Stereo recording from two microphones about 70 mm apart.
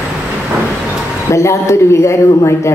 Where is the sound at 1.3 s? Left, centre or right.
Left.